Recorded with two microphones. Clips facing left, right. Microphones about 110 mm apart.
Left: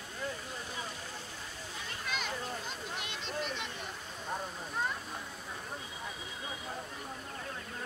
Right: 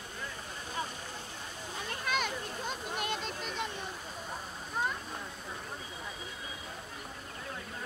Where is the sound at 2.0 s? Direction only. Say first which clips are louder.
Right 3 dB; 55° right (ahead or behind).